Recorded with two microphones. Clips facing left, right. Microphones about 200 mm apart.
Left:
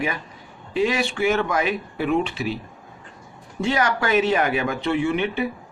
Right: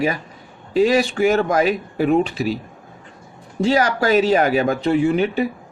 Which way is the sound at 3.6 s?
35° right (ahead or behind).